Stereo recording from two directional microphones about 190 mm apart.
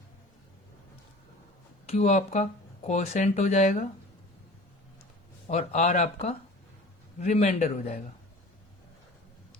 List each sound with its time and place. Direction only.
1.9 s speech: 35° left (ahead or behind)
5.5 s speech: 40° left (ahead or behind)